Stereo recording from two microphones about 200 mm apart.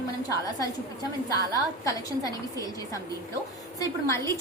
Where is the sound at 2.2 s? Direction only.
15° left (ahead or behind).